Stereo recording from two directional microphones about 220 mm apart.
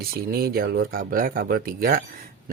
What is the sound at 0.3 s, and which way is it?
Speech, 45° right (ahead or behind).